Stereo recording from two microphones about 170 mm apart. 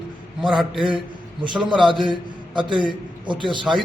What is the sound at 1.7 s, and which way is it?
A man's voice, 30° right (ahead or behind).